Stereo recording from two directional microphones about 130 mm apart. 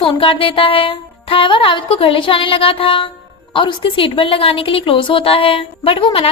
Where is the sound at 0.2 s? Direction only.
40° left (ahead or behind).